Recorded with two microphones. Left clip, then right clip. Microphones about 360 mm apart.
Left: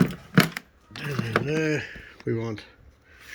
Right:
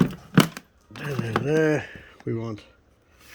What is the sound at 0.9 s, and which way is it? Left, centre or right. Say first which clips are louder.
Speech: left 1 dB; centre.